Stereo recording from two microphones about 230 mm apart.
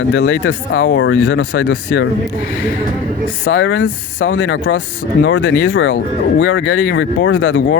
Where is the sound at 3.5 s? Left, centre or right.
Left.